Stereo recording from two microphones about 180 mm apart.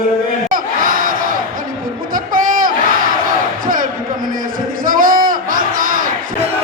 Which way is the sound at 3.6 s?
50° right (ahead or behind).